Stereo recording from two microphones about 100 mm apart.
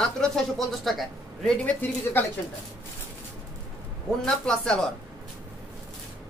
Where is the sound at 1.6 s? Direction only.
20° left (ahead or behind).